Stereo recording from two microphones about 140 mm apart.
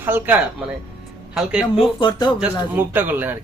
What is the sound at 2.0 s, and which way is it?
Speech, 30° left (ahead or behind).